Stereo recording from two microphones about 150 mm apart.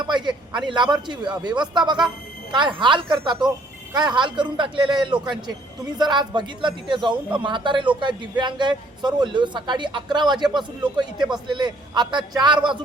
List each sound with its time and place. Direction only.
0.1 s a man's voice: 30° right (ahead or behind)